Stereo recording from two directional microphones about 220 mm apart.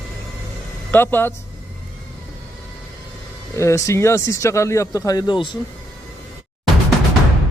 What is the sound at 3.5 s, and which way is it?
Speech, 15° left (ahead or behind).